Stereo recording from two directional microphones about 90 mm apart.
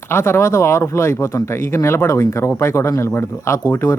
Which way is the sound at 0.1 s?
30° left (ahead or behind).